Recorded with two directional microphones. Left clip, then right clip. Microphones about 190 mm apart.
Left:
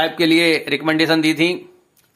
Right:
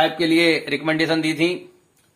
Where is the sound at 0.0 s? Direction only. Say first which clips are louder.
Left 2 dB; 20° left (ahead or behind).